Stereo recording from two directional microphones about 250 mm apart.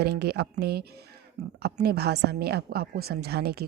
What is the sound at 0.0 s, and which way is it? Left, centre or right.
A woman's voice, right.